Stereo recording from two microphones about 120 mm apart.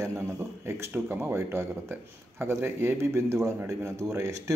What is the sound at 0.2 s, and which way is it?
Speech, 20° right (ahead or behind).